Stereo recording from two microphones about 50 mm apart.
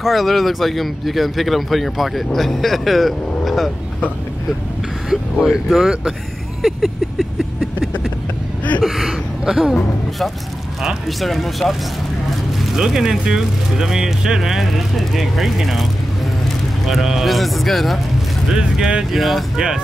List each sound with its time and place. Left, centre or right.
0.0 s speech: centre
5.1 s speech: centre
6.6 s a sound: centre
8.8 s gasp: centre
9.4 s speech: centre
9.8 s speech: centre
12.7 s speech: centre
18.5 s speech: centre
19.1 s speech: centre
19.5 s speech: centre